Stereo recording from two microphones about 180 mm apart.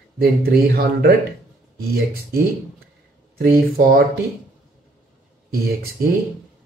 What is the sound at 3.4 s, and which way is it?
Speech, 55° right (ahead or behind).